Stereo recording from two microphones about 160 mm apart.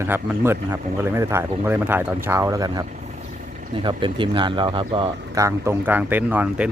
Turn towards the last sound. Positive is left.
turn(degrees=-10)  # may be behind; listen again after turning